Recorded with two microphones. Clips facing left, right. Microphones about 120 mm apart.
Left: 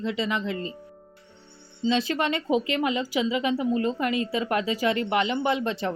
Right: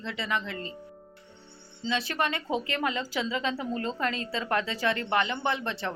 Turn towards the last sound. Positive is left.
turn(degrees=20)  # may be behind; listen again after turning